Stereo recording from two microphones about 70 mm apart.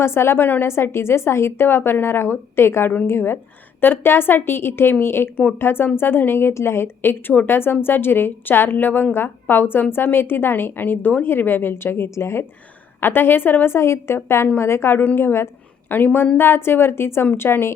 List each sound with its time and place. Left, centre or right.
0.0 s a woman's voice: left